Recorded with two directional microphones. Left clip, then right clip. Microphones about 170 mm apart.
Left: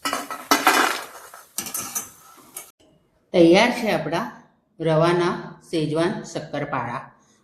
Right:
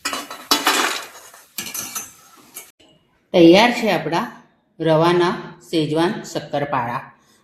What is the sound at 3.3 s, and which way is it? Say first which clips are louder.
Speech: right 4 dB; 40° right (ahead or behind).